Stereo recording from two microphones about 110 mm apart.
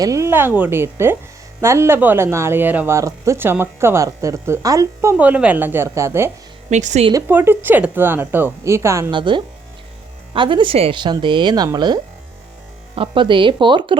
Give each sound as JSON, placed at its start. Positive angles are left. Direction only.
{"t": 0.0, "sound": "speech", "side_deg": -25}
{"t": 4.9, "sound": "speech", "side_deg": -15}
{"t": 6.7, "sound": "speech", "side_deg": -90}
{"t": 7.1, "sound": "speech", "side_deg": -20}
{"t": 9.0, "sound": "speech", "side_deg": -45}
{"t": 13.0, "sound": "speech", "side_deg": -50}